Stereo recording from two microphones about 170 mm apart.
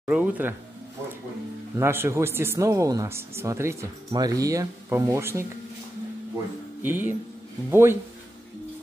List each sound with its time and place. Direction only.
0.0 s speech: 10° right (ahead or behind)
1.8 s speech: 15° right (ahead or behind)
6.8 s speech: 10° right (ahead or behind)